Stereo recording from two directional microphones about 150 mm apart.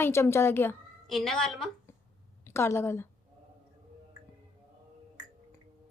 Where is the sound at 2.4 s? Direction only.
15° left (ahead or behind).